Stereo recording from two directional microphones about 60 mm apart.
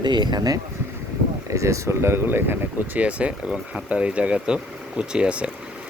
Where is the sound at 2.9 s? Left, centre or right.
Right.